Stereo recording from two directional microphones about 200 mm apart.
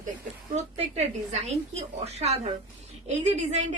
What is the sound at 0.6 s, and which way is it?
A woman's voice, 35° right (ahead or behind).